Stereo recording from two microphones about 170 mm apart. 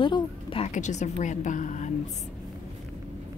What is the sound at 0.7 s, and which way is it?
A woman's voice, 45° left (ahead or behind).